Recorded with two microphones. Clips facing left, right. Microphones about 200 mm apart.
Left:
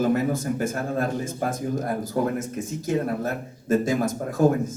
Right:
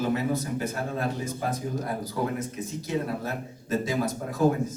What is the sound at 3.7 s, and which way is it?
Speech, 50° left (ahead or behind).